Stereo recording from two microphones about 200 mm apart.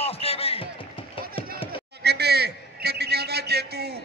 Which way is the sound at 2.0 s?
55° right (ahead or behind).